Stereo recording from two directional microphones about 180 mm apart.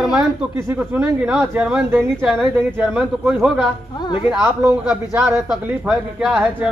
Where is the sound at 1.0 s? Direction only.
5° right (ahead or behind).